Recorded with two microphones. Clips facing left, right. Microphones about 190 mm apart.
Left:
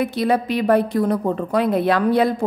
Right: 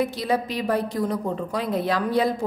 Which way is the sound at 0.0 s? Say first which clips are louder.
Left 4 dB; 60° left (ahead or behind).